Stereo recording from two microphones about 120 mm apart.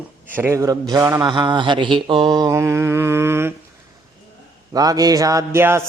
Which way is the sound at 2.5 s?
25° right (ahead or behind).